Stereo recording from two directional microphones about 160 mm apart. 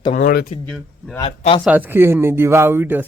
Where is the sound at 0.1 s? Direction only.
60° left (ahead or behind).